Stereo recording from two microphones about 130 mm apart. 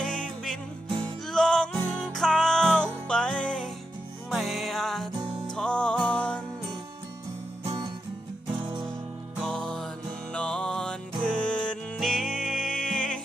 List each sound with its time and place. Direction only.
0.0 s music: 5° left (ahead or behind)
8.5 s music: 40° right (ahead or behind)
9.4 s music: 5° left (ahead or behind)